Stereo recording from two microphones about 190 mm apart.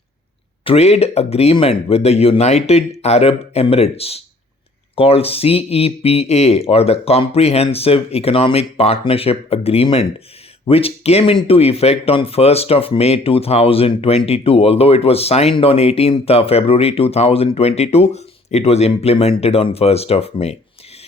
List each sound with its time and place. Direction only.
0.6 s speech: 30° left (ahead or behind)